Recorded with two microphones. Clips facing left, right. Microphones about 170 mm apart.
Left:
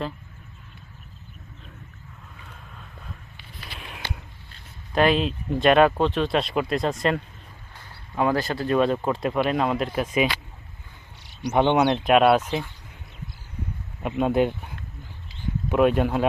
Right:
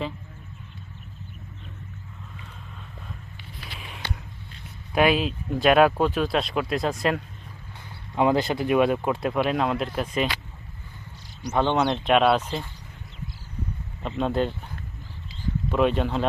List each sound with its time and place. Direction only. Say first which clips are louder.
3.8 s a sound: even; centre (ahead or behind)
4.9 s speech: left 1 dB; 5° right (ahead or behind)
8.1 s speech: right 2 dB; 20° right (ahead or behind); by 10.2 s 5° left (ahead or behind)
11.4 s speech: left 3 dB; 20° left (ahead or behind)
14.0 s speech: left 3 dB; 10° left (ahead or behind)
15.7 s speech: left 3 dB; 5° left (ahead or behind)